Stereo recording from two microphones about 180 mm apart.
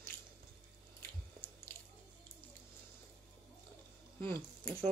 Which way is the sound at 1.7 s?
10° left (ahead or behind).